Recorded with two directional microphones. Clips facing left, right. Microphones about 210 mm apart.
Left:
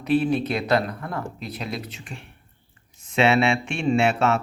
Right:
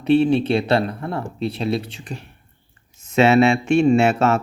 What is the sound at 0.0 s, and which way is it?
Speech, 25° right (ahead or behind).